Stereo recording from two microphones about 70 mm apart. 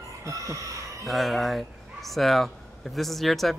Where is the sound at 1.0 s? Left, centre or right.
Centre.